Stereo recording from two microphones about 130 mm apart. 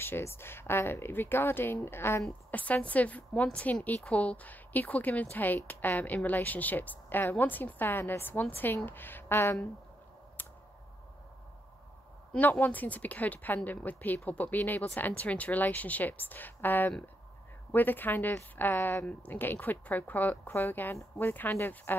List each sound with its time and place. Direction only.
0.0 s speech: 20° left (ahead or behind)
10.4 s a sound: 15° left (ahead or behind)
12.3 s speech: 15° left (ahead or behind)